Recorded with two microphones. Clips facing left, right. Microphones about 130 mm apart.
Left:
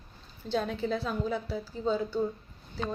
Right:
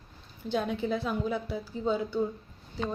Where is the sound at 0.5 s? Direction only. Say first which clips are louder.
Right 1 dB; 15° right (ahead or behind).